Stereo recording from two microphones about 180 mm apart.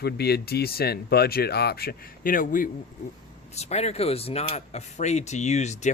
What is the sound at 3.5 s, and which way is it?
Speech, 35° left (ahead or behind).